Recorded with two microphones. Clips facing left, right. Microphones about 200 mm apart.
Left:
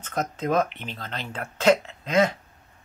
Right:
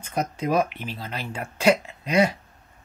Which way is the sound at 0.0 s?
10° right (ahead or behind).